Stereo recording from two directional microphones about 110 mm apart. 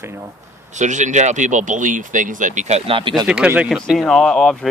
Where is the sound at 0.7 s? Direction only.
90° right; by 3.1 s 55° right (ahead or behind).